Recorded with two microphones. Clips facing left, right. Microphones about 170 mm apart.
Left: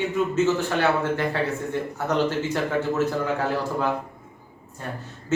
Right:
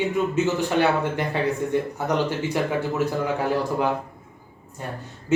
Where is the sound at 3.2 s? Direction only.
15° right (ahead or behind).